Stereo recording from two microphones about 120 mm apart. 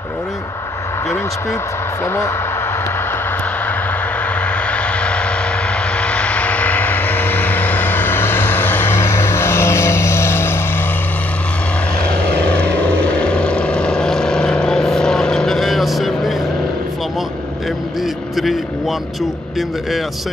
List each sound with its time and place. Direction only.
4.6 s vehicle: 10° left (ahead or behind)
13.2 s vehicle: 10° left (ahead or behind)
18.3 s speech: centre (ahead or behind)